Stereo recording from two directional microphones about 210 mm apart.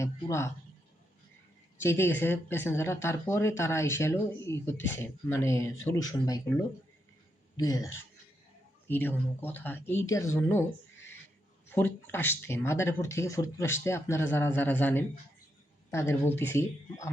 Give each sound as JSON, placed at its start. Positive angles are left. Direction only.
{"t": 0.0, "sound": "speech", "side_deg": 15}
{"t": 1.8, "sound": "speech", "side_deg": 10}
{"t": 7.5, "sound": "speech", "side_deg": 20}